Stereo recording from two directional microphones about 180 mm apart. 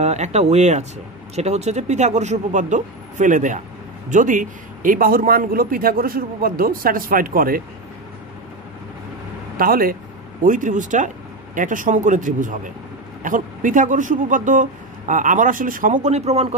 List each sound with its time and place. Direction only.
0.0 s speech: 40° right (ahead or behind)
9.6 s speech: 55° right (ahead or behind); by 16.4 s 35° right (ahead or behind)